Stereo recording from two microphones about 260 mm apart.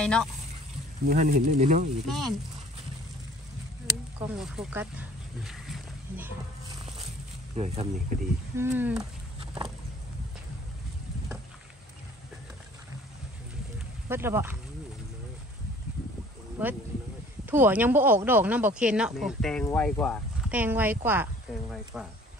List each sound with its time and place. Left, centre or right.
0.0 s speech: centre
1.0 s speech: right
2.0 s speech: centre
4.4 s speech: centre
7.5 s speech: right
8.5 s speech: centre
9.4 s a sound: right
14.0 s speech: centre
16.6 s speech: centre